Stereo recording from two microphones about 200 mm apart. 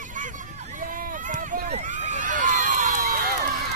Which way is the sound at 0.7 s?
40° right (ahead or behind).